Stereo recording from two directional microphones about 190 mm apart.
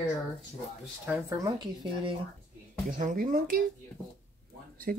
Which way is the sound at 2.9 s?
45° right (ahead or behind).